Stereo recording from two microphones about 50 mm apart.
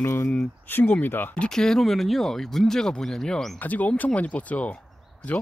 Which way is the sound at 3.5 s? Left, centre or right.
Left.